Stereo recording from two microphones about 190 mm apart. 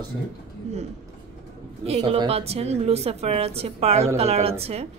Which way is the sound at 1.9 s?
30° right (ahead or behind).